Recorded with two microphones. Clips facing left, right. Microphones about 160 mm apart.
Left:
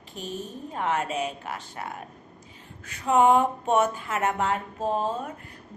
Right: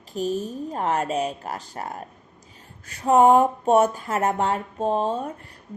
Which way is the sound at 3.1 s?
40° right (ahead or behind).